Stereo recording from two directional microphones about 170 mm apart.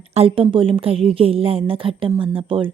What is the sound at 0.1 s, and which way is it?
A woman's voice, 35° right (ahead or behind).